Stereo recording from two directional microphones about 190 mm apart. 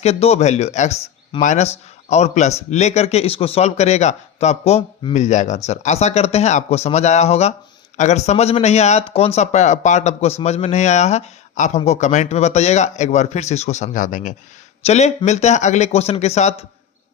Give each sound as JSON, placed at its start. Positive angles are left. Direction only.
{"t": 0.0, "sound": "speech", "side_deg": 35}